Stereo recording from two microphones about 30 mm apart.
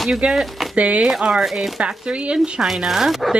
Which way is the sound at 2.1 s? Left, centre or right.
Right.